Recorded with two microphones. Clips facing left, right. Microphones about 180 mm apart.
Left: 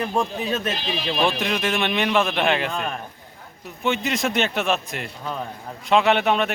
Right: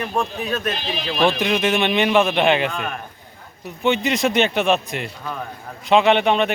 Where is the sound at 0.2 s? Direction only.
20° left (ahead or behind).